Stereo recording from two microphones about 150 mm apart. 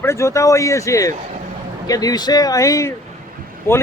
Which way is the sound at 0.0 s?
20° left (ahead or behind).